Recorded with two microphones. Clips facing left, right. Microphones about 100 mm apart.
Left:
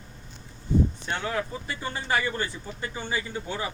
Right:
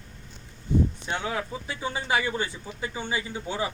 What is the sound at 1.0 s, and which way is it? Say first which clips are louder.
A man's voice: even; 10° right (ahead or behind).